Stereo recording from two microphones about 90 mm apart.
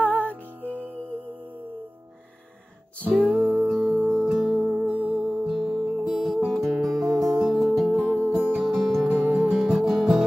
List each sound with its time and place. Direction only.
0.0 s music: 20° left (ahead or behind)
3.0 s music: 15° left (ahead or behind)
3.6 s music: 5° right (ahead or behind)
4.6 s music: 5° left (ahead or behind)